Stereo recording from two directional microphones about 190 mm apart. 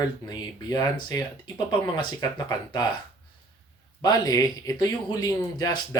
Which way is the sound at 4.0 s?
20° left (ahead or behind).